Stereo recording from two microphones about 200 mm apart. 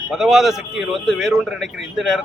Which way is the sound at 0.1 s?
Centre (ahead or behind).